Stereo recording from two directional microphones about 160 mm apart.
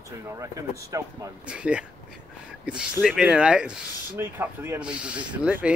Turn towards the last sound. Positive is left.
turn(degrees=-10)  # may be behind; listen again after turning